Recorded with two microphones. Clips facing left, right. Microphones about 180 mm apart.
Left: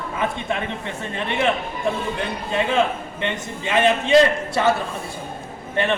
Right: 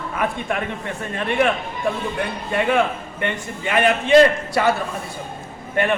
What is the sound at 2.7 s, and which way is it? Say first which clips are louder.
A man's voice: even; 25° left (ahead or behind).